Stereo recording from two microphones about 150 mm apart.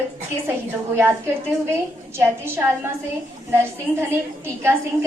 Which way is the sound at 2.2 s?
15° right (ahead or behind).